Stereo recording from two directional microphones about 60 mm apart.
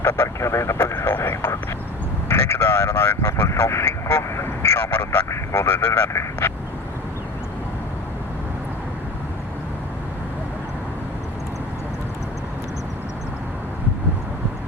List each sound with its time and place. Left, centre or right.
0.0 s speech: left
0.9 s speech: left
2.3 s vehicle: left